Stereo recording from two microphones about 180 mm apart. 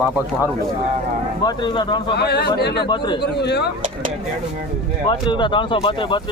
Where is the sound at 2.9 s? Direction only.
25° left (ahead or behind).